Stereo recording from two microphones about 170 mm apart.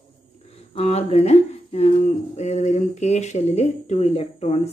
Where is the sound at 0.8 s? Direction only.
35° left (ahead or behind).